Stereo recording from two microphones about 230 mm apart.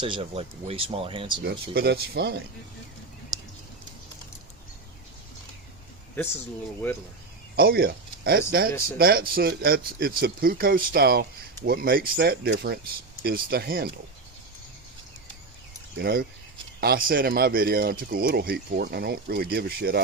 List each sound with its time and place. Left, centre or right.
0.0 s speech: right
1.4 s speech: right
7.5 s speech: right
16.0 s speech: right